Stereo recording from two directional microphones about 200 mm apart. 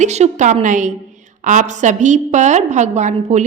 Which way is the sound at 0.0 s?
35° right (ahead or behind).